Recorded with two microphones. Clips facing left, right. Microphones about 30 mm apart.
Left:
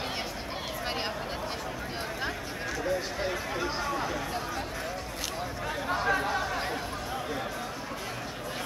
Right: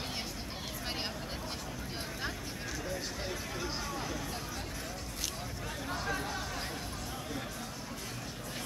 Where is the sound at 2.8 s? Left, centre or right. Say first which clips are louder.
Left 10 dB; left.